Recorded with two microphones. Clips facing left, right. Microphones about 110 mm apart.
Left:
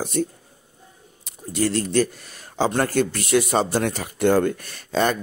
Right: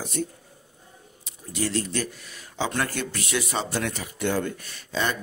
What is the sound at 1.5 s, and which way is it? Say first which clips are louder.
Speech: left 7 dB; 45° left (ahead or behind).